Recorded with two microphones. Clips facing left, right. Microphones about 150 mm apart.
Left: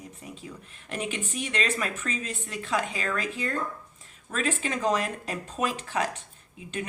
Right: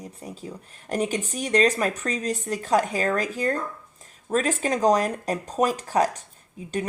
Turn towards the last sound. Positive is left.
turn(degrees=-40)  # may be behind; listen again after turning